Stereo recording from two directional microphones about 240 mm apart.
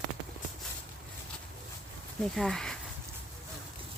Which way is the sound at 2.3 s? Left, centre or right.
Centre.